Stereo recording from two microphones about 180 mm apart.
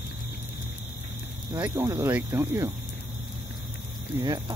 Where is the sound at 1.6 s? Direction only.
15° right (ahead or behind).